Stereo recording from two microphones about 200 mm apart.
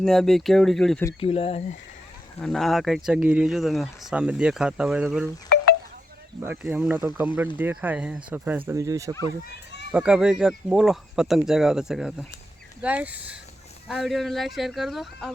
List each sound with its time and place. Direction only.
0.0 s speech: centre (ahead or behind)
1.2 s speech: 30° left (ahead or behind)
2.4 s speech: centre (ahead or behind)
6.4 s speech: 10° right (ahead or behind)
9.9 s speech: 5° right (ahead or behind)